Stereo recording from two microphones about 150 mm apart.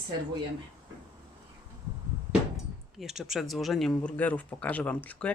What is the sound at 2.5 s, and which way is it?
Speech, centre (ahead or behind).